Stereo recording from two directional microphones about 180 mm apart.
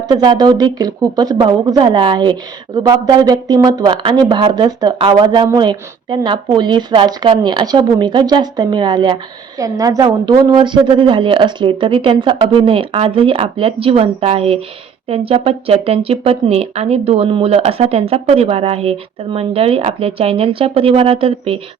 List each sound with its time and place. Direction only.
0.1 s speech: 25° right (ahead or behind)